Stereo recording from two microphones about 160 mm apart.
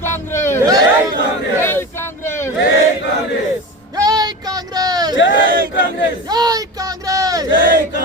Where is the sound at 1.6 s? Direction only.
15° left (ahead or behind).